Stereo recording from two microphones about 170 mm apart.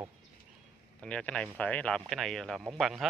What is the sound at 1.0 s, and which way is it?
Speech, 5° left (ahead or behind).